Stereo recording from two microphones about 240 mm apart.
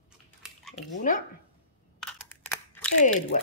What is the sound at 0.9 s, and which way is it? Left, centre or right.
Speech, left.